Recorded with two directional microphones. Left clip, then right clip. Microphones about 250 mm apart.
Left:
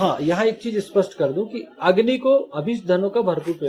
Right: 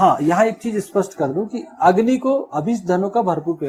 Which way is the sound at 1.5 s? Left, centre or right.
Right.